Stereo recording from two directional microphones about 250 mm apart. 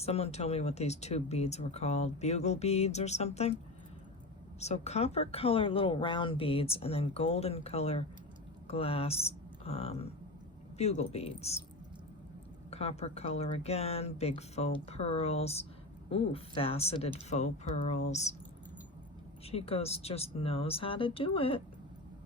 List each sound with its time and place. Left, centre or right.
0.0 s speech: left
4.6 s speech: left
12.7 s speech: left
19.5 s speech: left